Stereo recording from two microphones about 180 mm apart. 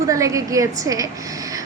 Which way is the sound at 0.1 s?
20° right (ahead or behind).